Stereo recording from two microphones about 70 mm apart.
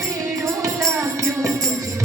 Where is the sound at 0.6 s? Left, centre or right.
Right.